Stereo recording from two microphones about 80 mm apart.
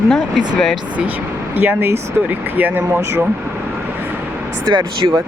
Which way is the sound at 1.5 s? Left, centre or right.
Right.